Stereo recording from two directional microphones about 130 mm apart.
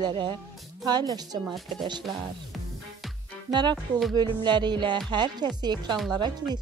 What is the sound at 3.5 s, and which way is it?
A woman's voice, 35° right (ahead or behind).